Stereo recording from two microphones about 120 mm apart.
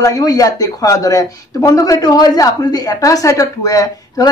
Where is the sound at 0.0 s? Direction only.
30° left (ahead or behind).